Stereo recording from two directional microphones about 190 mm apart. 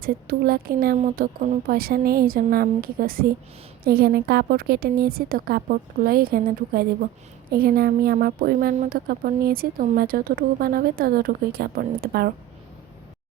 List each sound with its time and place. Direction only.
0.0 s speech: 50° right (ahead or behind)